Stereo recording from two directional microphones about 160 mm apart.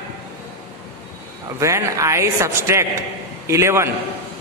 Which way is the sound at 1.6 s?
20° right (ahead or behind).